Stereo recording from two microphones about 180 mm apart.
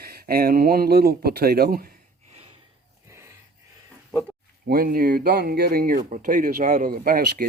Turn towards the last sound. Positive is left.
turn(degrees=-55)  # may be behind; listen again after turning